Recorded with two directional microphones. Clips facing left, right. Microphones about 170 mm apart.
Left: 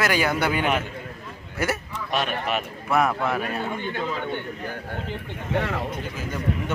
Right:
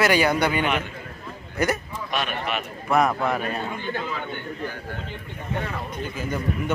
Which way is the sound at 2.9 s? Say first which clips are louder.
Right 1 dB; centre (ahead or behind).